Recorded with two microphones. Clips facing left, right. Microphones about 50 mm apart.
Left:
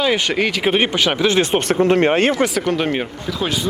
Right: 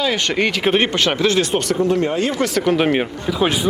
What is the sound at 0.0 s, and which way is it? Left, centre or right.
Speech, centre.